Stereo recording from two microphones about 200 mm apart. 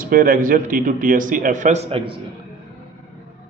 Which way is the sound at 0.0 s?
45° right (ahead or behind).